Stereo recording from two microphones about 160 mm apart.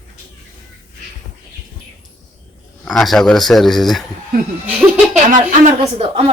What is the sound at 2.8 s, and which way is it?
Speech, 5° left (ahead or behind).